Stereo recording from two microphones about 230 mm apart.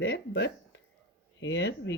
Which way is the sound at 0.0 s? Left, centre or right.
Left.